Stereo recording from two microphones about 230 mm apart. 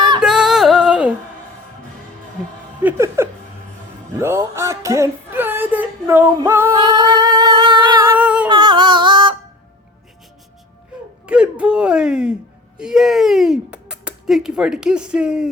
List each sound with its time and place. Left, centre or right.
0.2 s music: centre
2.8 s chuckle: centre
4.2 s female singing: centre
8.2 s humming: centre
8.4 s a sound: centre
11.3 s a sound: centre
12.8 s speech: centre